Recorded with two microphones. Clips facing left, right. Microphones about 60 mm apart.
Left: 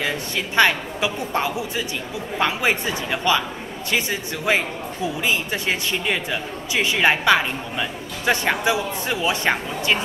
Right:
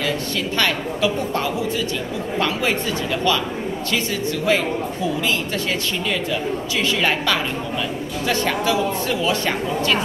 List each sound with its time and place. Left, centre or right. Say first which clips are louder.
0.6 s speech: left 3 dB; left